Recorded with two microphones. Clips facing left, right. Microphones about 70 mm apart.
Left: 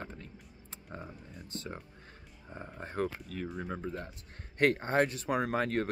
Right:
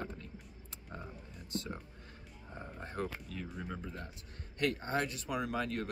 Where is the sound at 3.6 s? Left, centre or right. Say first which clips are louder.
Left 5 dB; left.